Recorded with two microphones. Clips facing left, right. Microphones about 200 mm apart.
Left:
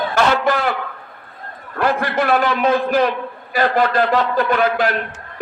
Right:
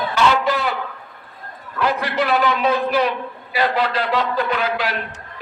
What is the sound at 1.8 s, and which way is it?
A man's voice, 50° left (ahead or behind).